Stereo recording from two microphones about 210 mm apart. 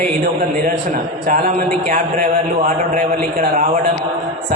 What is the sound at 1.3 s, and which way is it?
A man's voice, 40° right (ahead or behind).